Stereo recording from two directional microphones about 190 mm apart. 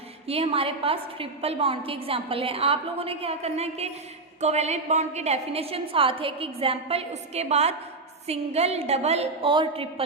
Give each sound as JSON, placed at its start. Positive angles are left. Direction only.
{"t": 0.3, "sound": "a woman's voice", "side_deg": -30}